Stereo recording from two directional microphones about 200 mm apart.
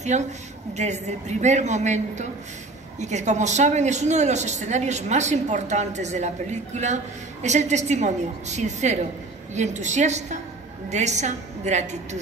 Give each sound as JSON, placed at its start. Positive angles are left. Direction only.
{"t": 0.0, "sound": "a woman's voice", "side_deg": -35}